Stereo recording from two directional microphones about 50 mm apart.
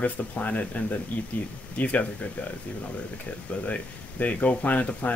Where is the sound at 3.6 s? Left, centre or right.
Left.